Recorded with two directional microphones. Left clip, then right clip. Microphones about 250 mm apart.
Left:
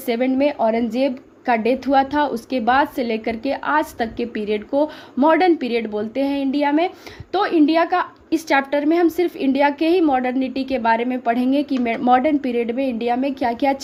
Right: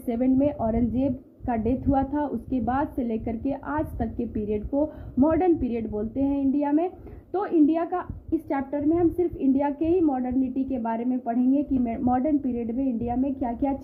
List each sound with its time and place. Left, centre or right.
0.0 s a woman's voice: centre